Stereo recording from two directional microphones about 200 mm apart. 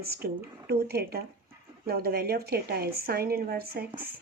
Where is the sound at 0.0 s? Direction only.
50° right (ahead or behind).